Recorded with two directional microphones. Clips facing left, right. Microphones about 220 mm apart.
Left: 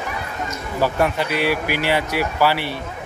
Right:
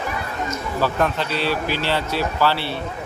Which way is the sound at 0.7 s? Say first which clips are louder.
Left 2 dB; 15° left (ahead or behind).